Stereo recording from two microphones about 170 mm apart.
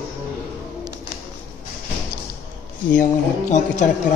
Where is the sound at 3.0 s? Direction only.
45° left (ahead or behind).